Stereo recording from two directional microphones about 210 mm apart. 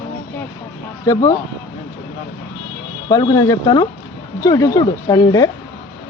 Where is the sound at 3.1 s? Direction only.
15° left (ahead or behind).